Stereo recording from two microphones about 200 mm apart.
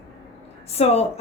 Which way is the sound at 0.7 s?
30° left (ahead or behind).